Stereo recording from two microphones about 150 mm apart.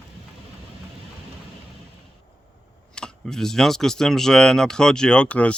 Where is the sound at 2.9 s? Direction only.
5° left (ahead or behind).